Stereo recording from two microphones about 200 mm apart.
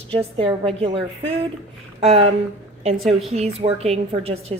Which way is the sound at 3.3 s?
30° right (ahead or behind).